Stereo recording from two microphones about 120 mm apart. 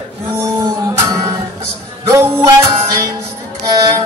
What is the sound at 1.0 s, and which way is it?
Music, 30° right (ahead or behind).